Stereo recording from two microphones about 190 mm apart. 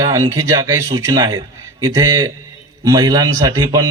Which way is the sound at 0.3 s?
15° right (ahead or behind).